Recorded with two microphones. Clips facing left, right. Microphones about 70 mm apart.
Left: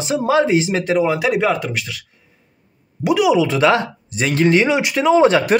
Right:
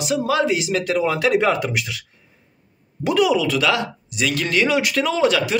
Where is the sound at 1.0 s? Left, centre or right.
Centre.